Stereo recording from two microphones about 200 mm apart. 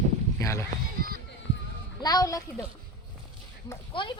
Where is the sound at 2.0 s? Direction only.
20° left (ahead or behind).